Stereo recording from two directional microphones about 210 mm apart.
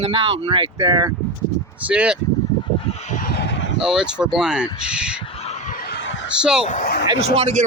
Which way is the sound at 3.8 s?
5° right (ahead or behind).